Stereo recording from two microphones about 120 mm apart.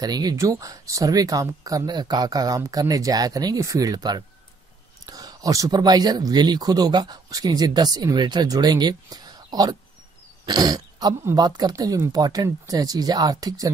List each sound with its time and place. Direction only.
0.0 s speech: 35° right (ahead or behind)